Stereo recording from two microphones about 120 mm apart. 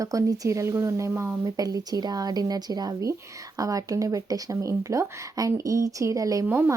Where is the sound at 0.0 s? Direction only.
30° right (ahead or behind).